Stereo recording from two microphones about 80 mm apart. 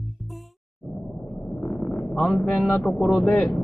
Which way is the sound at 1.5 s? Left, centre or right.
Centre.